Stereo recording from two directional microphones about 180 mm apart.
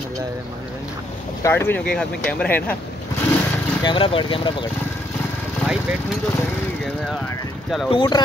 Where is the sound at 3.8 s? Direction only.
30° left (ahead or behind).